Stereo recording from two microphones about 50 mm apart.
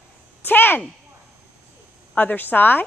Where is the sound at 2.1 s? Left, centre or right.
Left.